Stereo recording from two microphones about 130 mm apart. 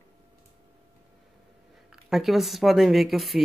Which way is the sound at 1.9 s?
Centre (ahead or behind).